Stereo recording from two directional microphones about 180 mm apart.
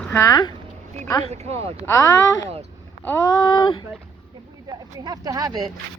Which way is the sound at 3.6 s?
25° left (ahead or behind).